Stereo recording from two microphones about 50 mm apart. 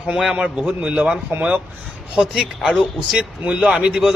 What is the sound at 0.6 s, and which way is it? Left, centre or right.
Speech, right.